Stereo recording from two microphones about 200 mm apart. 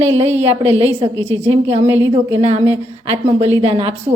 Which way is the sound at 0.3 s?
30° right (ahead or behind).